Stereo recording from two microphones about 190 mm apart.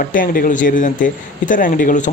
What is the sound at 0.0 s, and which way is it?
A man's voice, 45° left (ahead or behind).